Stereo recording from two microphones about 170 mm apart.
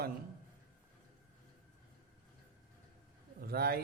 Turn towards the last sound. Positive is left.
turn(degrees=-65)  # may be behind; listen again after turning